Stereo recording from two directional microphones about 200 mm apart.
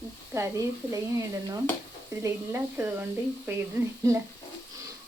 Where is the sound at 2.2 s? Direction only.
10° right (ahead or behind).